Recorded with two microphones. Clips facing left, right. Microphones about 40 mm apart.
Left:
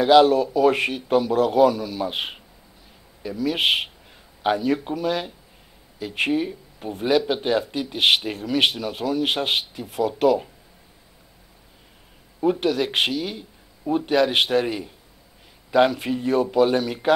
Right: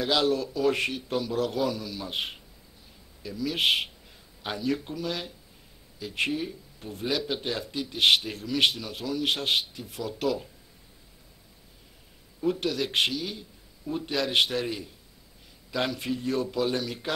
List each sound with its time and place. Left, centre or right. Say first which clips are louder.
0.0 s speech: left 11 dB; left
12.4 s speech: left 7 dB; left